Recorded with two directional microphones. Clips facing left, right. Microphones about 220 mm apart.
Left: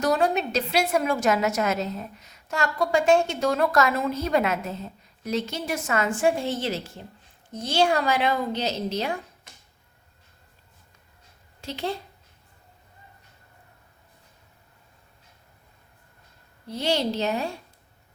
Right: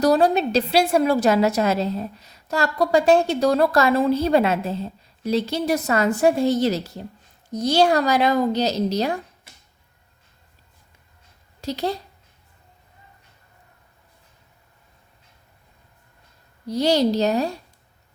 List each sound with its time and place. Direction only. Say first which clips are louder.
0.0 s a woman's voice: right 6 dB; 35° right (ahead or behind)
11.6 s a woman's voice: right 5 dB; 40° right (ahead or behind)
16.6 s a woman's voice: right 7 dB; 40° right (ahead or behind)